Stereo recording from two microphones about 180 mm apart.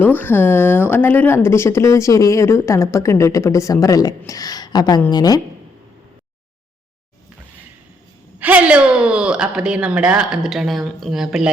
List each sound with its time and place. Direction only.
0.0 s speech: 10° left (ahead or behind)
8.4 s speech: 10° right (ahead or behind)